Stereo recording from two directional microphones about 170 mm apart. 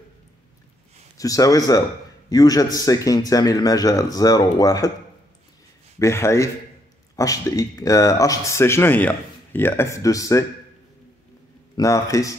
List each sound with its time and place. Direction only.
1.1 s a man's voice: 20° left (ahead or behind)
5.9 s a man's voice: 15° left (ahead or behind)
11.7 s a man's voice: 20° left (ahead or behind)